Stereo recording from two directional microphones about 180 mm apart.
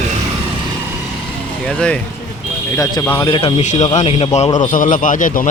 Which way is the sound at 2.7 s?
20° left (ahead or behind).